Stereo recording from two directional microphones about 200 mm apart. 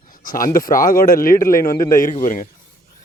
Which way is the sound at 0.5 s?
45° left (ahead or behind).